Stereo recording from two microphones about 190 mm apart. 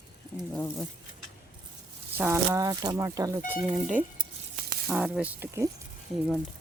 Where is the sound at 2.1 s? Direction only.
10° right (ahead or behind).